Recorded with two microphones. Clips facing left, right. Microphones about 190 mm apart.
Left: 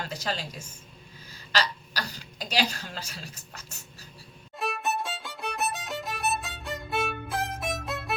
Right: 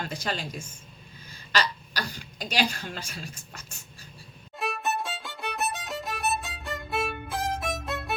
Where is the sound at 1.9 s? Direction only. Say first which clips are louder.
Right 1 dB; 35° left (ahead or behind).